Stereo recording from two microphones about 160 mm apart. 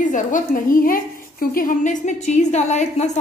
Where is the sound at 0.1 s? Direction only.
60° left (ahead or behind).